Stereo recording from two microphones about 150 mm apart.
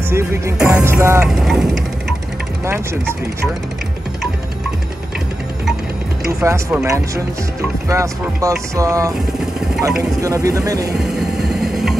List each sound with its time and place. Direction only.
0.1 s music: 15° right (ahead or behind)
0.6 s speech: 5° right (ahead or behind)
0.8 s music: 15° right (ahead or behind)
1.2 s speech: 5° right (ahead or behind)
2.6 s music: 15° right (ahead or behind)
6.4 s speech: 20° right (ahead or behind)
10.2 s speech: 20° right (ahead or behind)
11.4 s vehicle: centre (ahead or behind)